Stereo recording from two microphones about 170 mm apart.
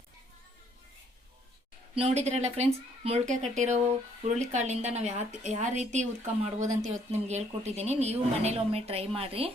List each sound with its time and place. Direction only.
2.0 s a woman's voice: 40° right (ahead or behind)